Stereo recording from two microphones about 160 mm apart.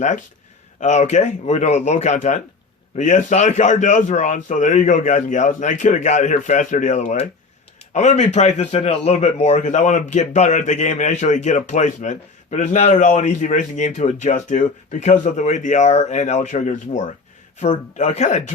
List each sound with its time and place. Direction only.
0.8 s a man's voice: 45° left (ahead or behind)